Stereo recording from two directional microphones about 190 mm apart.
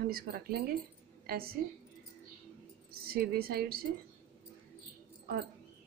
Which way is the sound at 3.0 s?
55° right (ahead or behind).